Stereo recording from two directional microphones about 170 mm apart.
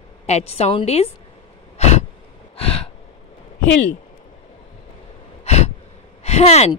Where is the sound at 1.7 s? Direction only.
40° left (ahead or behind).